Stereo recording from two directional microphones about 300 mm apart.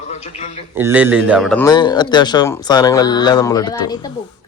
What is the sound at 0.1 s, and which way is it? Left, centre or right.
Speech, left.